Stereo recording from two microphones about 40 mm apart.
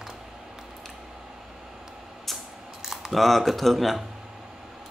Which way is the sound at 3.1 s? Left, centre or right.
Centre.